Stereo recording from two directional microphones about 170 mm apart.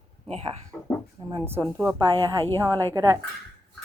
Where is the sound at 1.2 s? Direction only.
20° right (ahead or behind).